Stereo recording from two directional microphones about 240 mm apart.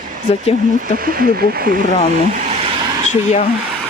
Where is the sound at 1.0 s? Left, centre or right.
Right.